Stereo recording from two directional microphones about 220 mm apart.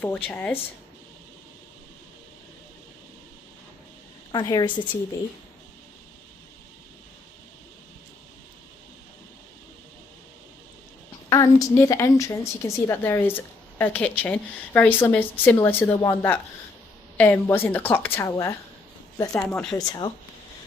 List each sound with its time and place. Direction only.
0.0 s a woman's voice: 5° left (ahead or behind)
4.3 s a woman's voice: 20° left (ahead or behind)
11.3 s a woman's voice: 15° left (ahead or behind)
19.5 s speech: 5° left (ahead or behind)
19.7 s a woman's voice: 15° left (ahead or behind)